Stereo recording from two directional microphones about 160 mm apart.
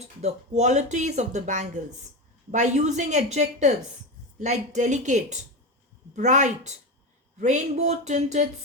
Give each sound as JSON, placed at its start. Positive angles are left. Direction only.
{"t": 0.2, "sound": "speech", "side_deg": -45}